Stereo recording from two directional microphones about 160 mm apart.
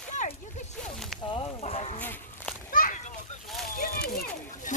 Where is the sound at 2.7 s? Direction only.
55° left (ahead or behind).